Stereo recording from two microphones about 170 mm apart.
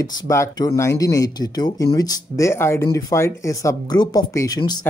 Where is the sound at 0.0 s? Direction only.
20° left (ahead or behind).